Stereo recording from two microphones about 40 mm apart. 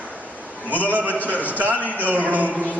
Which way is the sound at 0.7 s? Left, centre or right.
Right.